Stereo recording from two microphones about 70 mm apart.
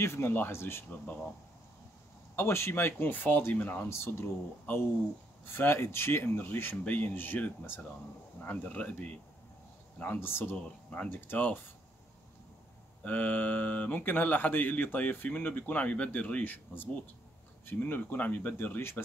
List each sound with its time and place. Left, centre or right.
0.0 s speech: left
2.3 s speech: left
3.9 s speech: left
10.2 s speech: left
10.5 s speech: centre
11.1 s speech: left
13.0 s speech: left